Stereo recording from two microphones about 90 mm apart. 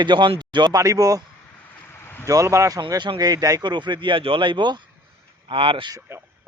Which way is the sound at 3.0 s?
50° right (ahead or behind).